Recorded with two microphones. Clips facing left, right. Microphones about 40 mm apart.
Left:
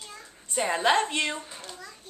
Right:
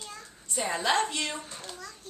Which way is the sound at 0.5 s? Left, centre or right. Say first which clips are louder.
Left 4 dB; left.